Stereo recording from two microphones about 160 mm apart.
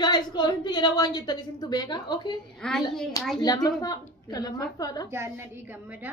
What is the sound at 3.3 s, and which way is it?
A woman's voice, 25° left (ahead or behind).